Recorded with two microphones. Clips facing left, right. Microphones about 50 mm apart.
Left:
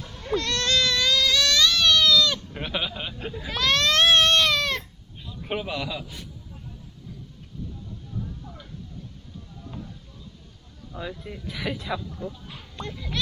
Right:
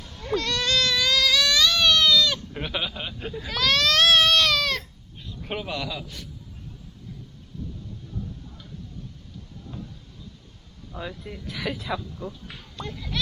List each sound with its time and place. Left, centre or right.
0.0 s a sound: left
0.3 s baby cry: centre
2.5 s baby cry: centre
5.5 s a man's voice: centre
11.1 s speech: centre